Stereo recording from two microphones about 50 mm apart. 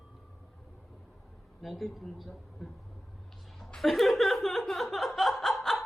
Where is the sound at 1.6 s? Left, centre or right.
Centre.